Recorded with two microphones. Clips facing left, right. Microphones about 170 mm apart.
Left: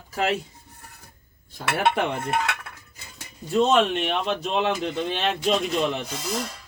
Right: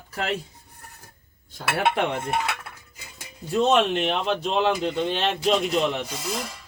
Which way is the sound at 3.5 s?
Centre (ahead or behind).